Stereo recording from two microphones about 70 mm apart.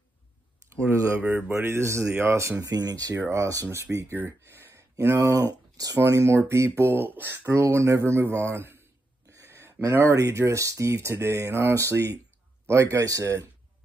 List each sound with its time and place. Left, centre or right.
1.2 s speech: right
2.6 s speech: right
3.3 s speech: right
4.2 s a sound: right
4.9 s speech: right
5.5 s a sound: right
5.9 s speech: right
6.8 s speech: right
7.5 s speech: right
9.3 s a sound: right
9.9 s speech: right